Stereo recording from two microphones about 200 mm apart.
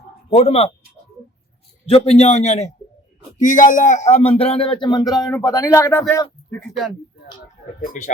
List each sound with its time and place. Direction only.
0.3 s speech: 30° left (ahead or behind)
1.9 s speech: 30° left (ahead or behind); by 6.9 s centre (ahead or behind)
7.8 s speech: 40° left (ahead or behind)